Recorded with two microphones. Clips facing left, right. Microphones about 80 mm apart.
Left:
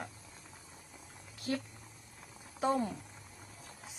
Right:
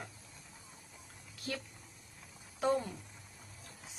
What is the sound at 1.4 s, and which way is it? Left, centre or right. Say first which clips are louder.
Speech: left 5 dB; left.